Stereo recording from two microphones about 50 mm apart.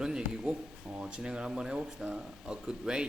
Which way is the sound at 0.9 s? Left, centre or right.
Right.